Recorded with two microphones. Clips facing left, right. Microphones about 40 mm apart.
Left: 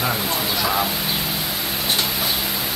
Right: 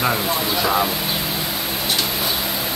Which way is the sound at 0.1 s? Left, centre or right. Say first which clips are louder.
Right 2 dB; centre.